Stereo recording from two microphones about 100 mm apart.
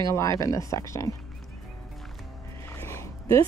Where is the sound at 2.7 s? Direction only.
25° left (ahead or behind).